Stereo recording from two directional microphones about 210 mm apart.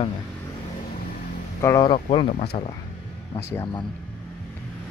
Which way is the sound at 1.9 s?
25° left (ahead or behind).